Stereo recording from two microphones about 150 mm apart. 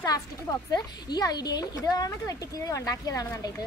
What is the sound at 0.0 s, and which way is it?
A woman's voice, 25° left (ahead or behind).